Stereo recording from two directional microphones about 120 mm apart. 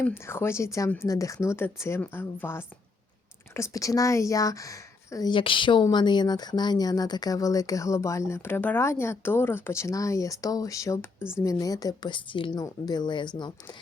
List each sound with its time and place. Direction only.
0.0 s speech: 20° left (ahead or behind)
5.3 s a woman's voice: 45° left (ahead or behind)